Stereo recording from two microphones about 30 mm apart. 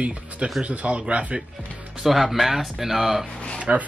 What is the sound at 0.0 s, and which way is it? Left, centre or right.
Speech, right.